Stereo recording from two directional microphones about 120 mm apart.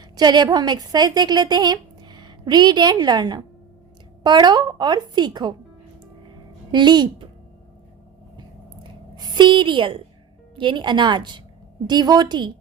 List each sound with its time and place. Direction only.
0.0 s a woman's voice: 35° right (ahead or behind)
6.7 s a woman's voice: 40° right (ahead or behind)
9.1 s a woman's voice: 35° right (ahead or behind)